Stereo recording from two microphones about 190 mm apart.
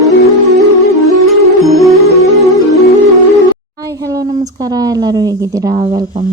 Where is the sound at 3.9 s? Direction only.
20° right (ahead or behind).